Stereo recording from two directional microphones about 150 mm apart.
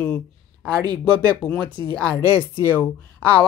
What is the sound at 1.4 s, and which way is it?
Speech, 10° left (ahead or behind).